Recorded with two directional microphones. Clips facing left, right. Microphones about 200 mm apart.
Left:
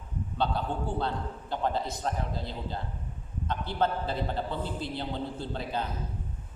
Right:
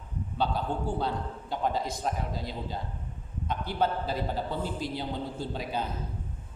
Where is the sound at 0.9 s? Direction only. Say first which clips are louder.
Right 1 dB; 10° right (ahead or behind).